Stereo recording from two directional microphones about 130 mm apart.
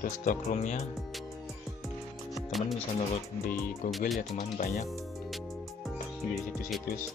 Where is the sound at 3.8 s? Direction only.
Centre (ahead or behind).